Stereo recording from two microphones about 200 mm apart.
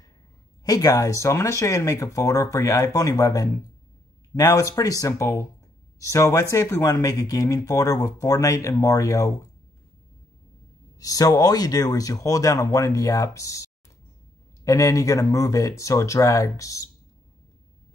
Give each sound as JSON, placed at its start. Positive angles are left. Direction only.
{"t": 0.7, "sound": "speech", "side_deg": 20}
{"t": 11.0, "sound": "speech", "side_deg": 15}